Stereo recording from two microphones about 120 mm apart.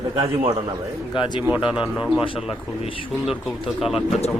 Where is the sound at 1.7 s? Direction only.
5° right (ahead or behind).